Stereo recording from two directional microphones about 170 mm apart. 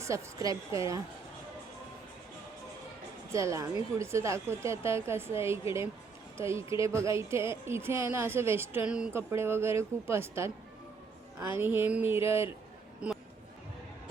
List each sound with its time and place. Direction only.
0.0 s a woman's voice: 15° right (ahead or behind)
3.3 s speech: 20° right (ahead or behind)
11.5 s speech: 10° right (ahead or behind)
13.0 s a sound: 10° right (ahead or behind)